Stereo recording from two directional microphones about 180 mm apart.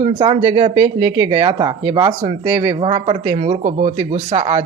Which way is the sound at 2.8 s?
35° right (ahead or behind).